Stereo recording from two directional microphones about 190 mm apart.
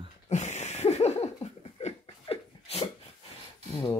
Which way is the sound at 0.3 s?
35° left (ahead or behind).